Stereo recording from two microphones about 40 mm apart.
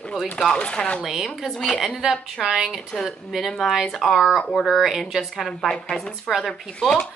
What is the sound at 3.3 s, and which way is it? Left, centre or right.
Speech, centre.